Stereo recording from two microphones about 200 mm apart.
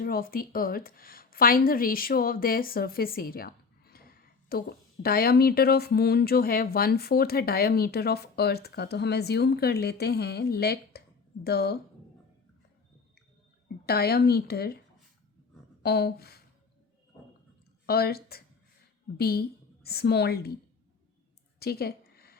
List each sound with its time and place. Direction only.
0.0 s a woman's voice: 45° left (ahead or behind)
13.8 s speech: 50° left (ahead or behind)
15.8 s speech: 55° left (ahead or behind)
17.8 s speech: 50° left (ahead or behind)
21.6 s a sound: 50° left (ahead or behind)